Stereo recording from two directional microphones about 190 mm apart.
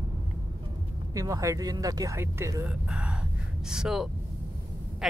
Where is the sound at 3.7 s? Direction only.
Centre (ahead or behind).